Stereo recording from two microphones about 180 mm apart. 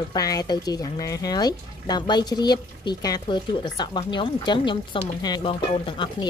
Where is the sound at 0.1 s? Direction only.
20° left (ahead or behind).